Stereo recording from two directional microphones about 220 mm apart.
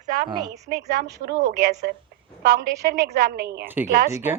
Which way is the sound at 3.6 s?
10° right (ahead or behind).